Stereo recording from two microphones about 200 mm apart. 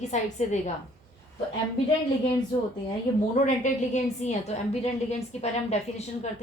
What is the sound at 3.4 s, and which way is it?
A woman's voice, 35° left (ahead or behind).